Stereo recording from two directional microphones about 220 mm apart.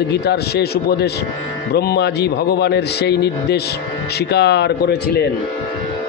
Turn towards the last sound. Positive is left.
turn(degrees=45)  # may be behind; listen again after turning